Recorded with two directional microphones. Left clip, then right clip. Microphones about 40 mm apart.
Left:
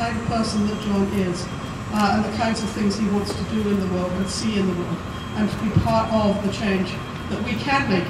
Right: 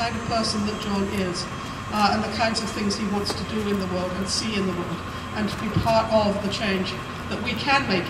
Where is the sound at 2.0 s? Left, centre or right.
Centre.